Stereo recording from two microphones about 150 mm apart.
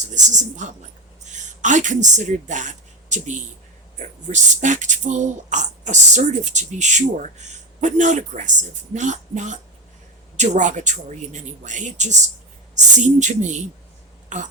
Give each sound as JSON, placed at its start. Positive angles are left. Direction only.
{"t": 0.0, "sound": "speech", "side_deg": -55}